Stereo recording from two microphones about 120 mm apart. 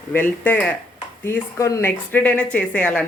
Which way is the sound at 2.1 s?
10° left (ahead or behind).